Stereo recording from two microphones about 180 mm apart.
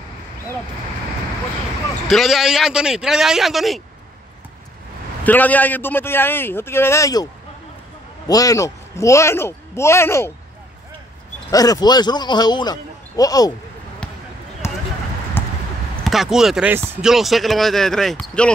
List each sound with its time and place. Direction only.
2.0 s speech: centre (ahead or behind)
5.2 s a man's voice: 10° left (ahead or behind)
8.3 s a man's voice: 20° left (ahead or behind)
11.5 s a man's voice: 20° left (ahead or behind)
15.4 s clip-clop: 10° left (ahead or behind)
16.0 s speech: centre (ahead or behind)